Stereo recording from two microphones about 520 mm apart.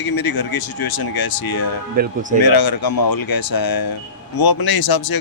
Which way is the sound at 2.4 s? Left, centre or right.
Left.